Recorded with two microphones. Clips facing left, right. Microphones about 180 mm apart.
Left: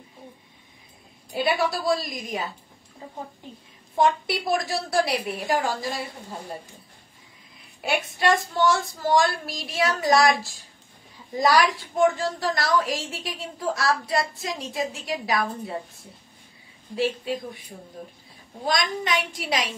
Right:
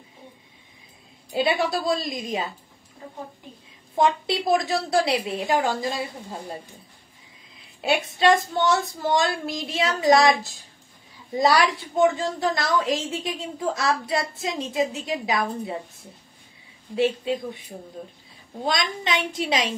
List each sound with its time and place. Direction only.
1.3 s a woman's voice: 20° right (ahead or behind)
3.9 s a woman's voice: 20° right (ahead or behind)
7.8 s a woman's voice: 20° right (ahead or behind)
16.9 s a woman's voice: 25° right (ahead or behind)
18.7 s a woman's voice: 25° right (ahead or behind)